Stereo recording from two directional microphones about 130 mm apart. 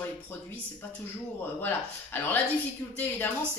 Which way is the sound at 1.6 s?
15° left (ahead or behind).